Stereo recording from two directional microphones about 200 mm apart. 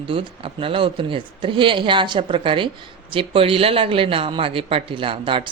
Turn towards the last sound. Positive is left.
turn(degrees=-25)  # may be behind; listen again after turning